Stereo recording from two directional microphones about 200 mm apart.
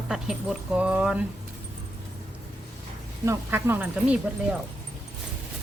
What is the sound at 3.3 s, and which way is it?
Speech, 10° right (ahead or behind).